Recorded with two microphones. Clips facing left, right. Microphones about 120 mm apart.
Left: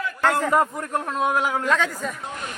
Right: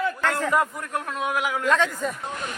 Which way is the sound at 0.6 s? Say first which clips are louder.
Left 3 dB; 35° left (ahead or behind).